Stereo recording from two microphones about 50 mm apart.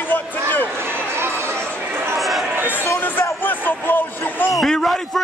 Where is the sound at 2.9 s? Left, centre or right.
Left.